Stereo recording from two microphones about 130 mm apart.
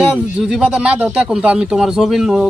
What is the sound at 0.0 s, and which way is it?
Speech, 5° right (ahead or behind).